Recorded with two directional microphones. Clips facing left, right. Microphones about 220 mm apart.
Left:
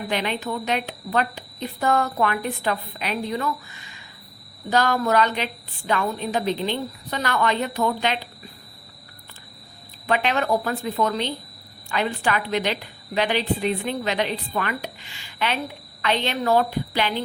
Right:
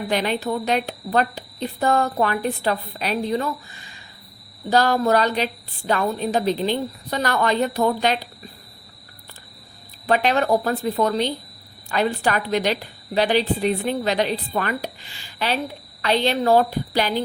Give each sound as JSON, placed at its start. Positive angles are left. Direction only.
{"t": 0.1, "sound": "a woman's voice", "side_deg": -40}
{"t": 10.1, "sound": "a woman's voice", "side_deg": -40}